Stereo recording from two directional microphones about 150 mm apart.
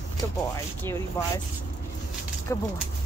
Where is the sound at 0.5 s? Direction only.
15° left (ahead or behind).